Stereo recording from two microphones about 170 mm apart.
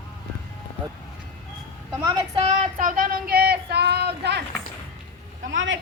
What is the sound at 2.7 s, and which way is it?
Speech, 50° right (ahead or behind).